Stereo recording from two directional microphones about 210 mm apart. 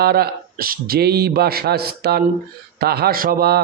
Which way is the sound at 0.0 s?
50° right (ahead or behind).